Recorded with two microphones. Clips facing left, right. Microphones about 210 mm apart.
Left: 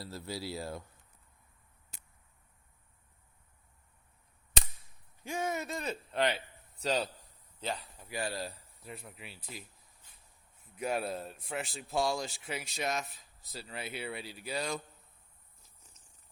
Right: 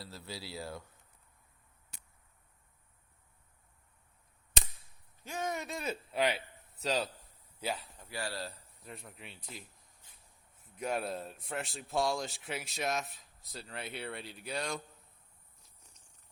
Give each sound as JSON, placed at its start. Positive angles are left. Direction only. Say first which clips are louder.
{"t": 0.0, "sound": "speech", "louder": "left 5 dB", "side_deg": 45}
{"t": 5.2, "sound": "speech", "louder": "left 2 dB", "side_deg": 10}
{"t": 7.9, "sound": "speech", "louder": "left 3 dB", "side_deg": 15}
{"t": 8.8, "sound": "speech", "louder": "left 2 dB", "side_deg": 0}
{"t": 10.8, "sound": "speech", "louder": "left 1 dB", "side_deg": 5}
{"t": 15.6, "sound": "purr", "louder": "left 1 dB", "side_deg": 5}